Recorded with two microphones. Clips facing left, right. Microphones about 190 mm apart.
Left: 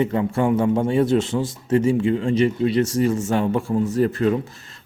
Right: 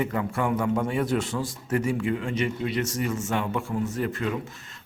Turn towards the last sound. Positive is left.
turn(degrees=35)  # may be behind; listen again after turning